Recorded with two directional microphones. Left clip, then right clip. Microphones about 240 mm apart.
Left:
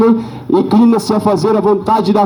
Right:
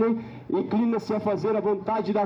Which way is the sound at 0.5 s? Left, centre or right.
Left.